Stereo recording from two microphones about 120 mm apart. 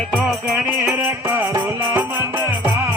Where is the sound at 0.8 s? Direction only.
20° right (ahead or behind).